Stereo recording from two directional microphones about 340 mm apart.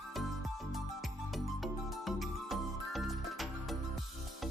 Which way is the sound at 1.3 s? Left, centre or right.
Centre.